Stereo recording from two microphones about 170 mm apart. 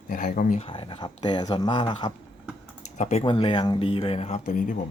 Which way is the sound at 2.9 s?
45° left (ahead or behind).